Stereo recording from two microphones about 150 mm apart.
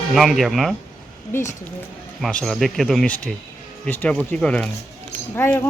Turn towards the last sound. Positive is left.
turn(degrees=15)  # may be behind; listen again after turning